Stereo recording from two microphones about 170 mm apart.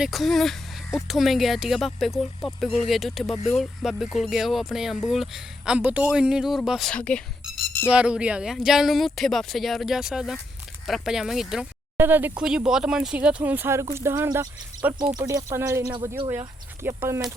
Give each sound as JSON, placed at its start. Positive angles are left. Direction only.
{"t": 0.0, "sound": "speech", "side_deg": 0}